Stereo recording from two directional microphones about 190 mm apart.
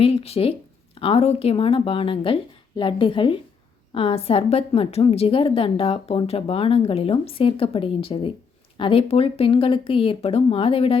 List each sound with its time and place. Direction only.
0.0 s a woman's voice: 30° left (ahead or behind)